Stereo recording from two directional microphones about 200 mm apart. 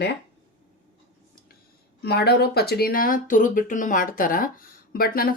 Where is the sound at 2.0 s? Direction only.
55° left (ahead or behind).